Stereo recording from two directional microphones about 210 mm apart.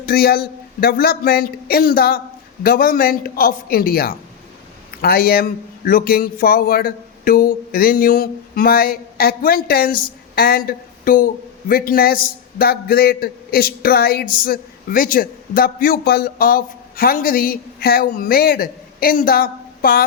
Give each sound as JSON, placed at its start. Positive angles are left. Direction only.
{"t": 0.0, "sound": "a man's voice", "side_deg": 45}